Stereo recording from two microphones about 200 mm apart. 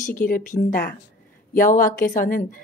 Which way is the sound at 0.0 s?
45° left (ahead or behind).